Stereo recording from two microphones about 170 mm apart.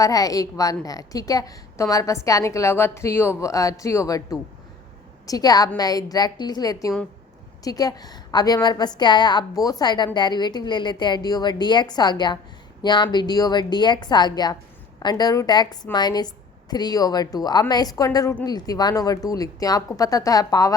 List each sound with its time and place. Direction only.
0.0 s a woman's voice: 20° left (ahead or behind)